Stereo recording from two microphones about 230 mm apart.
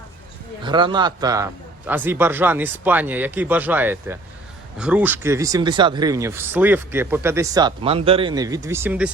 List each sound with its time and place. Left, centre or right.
0.6 s a man's voice: centre